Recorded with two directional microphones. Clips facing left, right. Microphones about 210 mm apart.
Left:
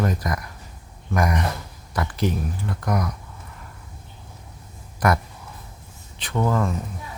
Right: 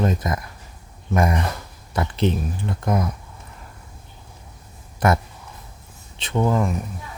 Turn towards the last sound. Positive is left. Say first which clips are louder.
# right 2 dB
turn(degrees=-15)  # may be behind; listen again after turning